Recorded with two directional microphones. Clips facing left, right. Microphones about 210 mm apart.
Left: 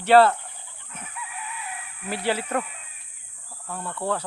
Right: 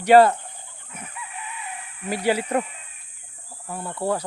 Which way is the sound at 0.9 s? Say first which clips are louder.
Right 2 dB; 10° right (ahead or behind).